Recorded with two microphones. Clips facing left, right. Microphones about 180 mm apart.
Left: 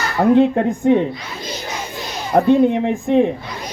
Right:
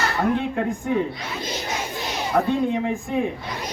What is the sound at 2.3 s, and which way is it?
Speech, 45° left (ahead or behind).